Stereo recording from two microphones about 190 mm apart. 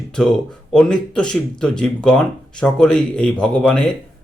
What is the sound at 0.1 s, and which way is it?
Speech, 5° left (ahead or behind).